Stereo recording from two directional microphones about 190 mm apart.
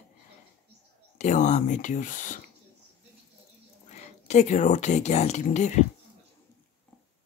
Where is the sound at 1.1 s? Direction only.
40° left (ahead or behind).